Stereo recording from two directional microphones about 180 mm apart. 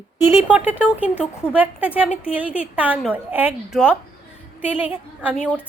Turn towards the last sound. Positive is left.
turn(degrees=-10)  # may be behind; listen again after turning